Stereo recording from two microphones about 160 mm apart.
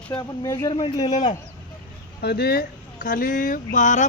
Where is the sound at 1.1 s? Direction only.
50° left (ahead or behind).